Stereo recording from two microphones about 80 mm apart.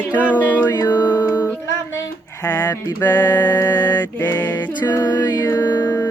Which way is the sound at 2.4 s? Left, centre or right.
Left.